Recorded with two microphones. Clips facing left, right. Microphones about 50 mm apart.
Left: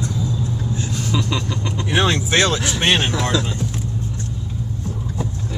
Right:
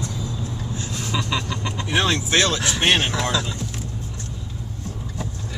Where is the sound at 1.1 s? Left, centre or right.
Centre.